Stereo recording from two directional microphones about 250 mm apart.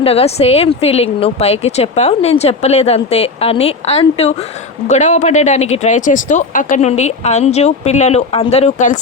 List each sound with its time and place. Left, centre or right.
0.0 s speech: left